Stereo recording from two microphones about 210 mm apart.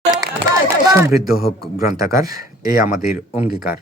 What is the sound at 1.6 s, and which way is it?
Speech, 15° right (ahead or behind).